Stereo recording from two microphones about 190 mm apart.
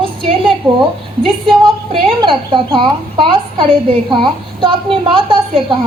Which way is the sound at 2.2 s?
25° right (ahead or behind).